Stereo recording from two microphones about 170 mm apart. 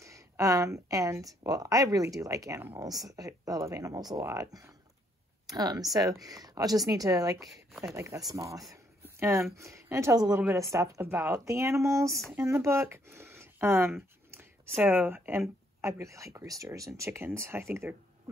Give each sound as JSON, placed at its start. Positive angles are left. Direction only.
{"t": 0.0, "sound": "speech", "side_deg": -20}